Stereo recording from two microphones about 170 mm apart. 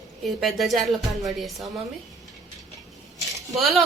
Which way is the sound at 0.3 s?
Centre (ahead or behind).